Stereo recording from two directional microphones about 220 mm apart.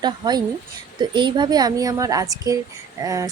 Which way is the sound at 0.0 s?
20° right (ahead or behind).